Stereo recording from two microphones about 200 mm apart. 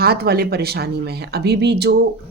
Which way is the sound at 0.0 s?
50° right (ahead or behind).